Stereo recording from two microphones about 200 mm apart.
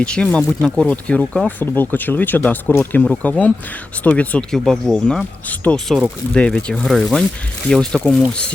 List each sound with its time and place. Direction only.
0.0 s speech: 5° left (ahead or behind)